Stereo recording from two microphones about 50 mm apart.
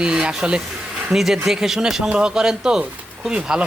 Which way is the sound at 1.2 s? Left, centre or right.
Centre.